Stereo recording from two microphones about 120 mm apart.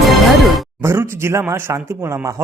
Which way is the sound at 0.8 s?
20° right (ahead or behind).